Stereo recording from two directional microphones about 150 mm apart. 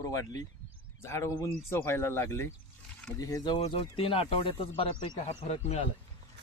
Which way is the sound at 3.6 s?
40° left (ahead or behind).